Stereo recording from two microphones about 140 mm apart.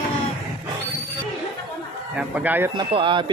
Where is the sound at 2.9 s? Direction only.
35° right (ahead or behind).